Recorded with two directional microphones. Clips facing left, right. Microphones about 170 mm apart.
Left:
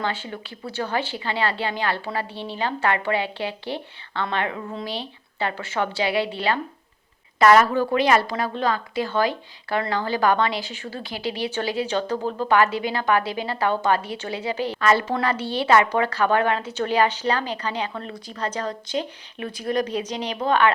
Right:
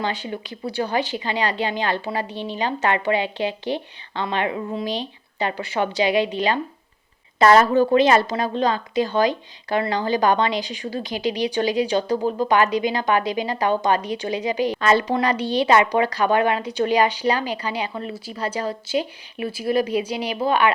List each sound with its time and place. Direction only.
0.0 s a woman's voice: 15° right (ahead or behind)